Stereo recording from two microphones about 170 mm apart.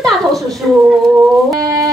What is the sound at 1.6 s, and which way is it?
Music, 20° right (ahead or behind).